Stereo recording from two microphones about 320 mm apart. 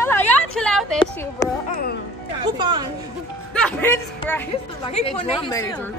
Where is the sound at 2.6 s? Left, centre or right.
Centre.